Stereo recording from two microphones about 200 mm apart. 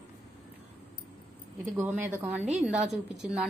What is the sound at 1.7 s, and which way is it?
A woman's voice, 10° right (ahead or behind).